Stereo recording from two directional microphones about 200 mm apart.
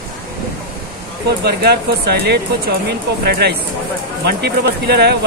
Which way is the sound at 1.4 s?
55° right (ahead or behind).